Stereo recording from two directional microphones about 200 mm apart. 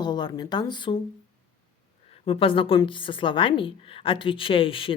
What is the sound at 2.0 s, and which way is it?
A woman's voice, 30° left (ahead or behind).